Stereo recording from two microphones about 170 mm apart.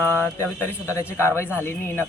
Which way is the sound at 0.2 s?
15° left (ahead or behind).